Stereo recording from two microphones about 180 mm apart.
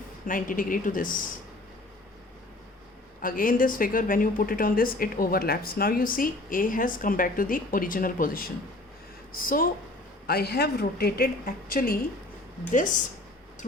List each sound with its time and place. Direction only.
0.3 s speech: 50° left (ahead or behind)
3.2 s a woman's voice: 50° left (ahead or behind)